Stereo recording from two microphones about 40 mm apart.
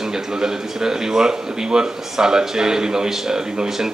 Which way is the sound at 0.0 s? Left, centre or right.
Centre.